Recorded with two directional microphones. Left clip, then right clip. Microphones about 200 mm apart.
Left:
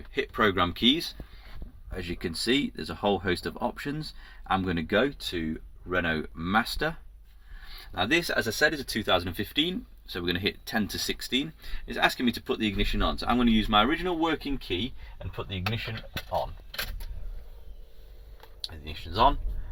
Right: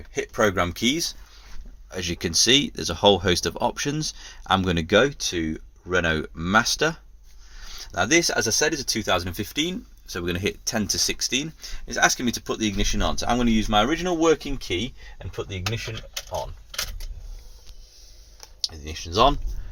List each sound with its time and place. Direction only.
0.1 s speech: 45° right (ahead or behind)
18.9 s speech: 55° right (ahead or behind)